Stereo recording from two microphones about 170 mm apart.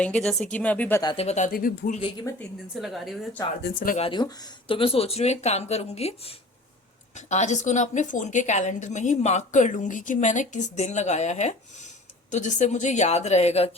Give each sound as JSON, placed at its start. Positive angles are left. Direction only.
{"t": 0.0, "sound": "speech", "side_deg": 5}
{"t": 1.0, "sound": "speech", "side_deg": 35}
{"t": 1.5, "sound": "speech", "side_deg": 55}
{"t": 2.0, "sound": "speech", "side_deg": 30}
{"t": 2.8, "sound": "speech", "side_deg": 0}
{"t": 3.6, "sound": "speech", "side_deg": 55}
{"t": 3.9, "sound": "a woman's voice", "side_deg": 30}